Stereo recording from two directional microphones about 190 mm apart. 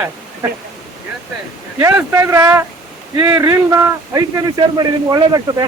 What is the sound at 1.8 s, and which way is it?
A man's voice, 15° right (ahead or behind).